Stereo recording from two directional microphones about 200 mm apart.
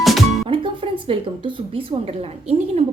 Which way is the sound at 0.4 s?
25° right (ahead or behind).